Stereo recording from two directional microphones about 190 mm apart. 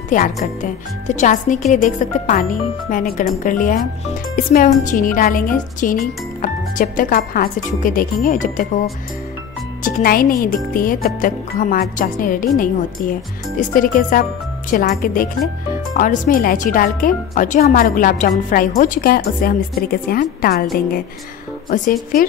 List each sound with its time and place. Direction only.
0.1 s speech: 45° left (ahead or behind)
9.8 s speech: 45° left (ahead or behind)
13.6 s speech: 45° left (ahead or behind)
21.6 s speech: 45° left (ahead or behind)